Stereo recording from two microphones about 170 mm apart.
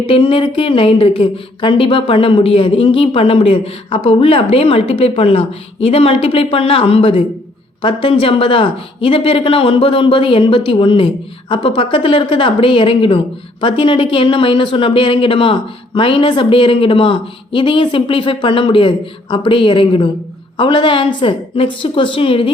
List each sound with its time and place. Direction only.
0.0 s speech: 30° left (ahead or behind)